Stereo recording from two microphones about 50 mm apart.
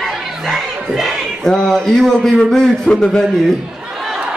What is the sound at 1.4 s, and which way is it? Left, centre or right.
Speech, centre.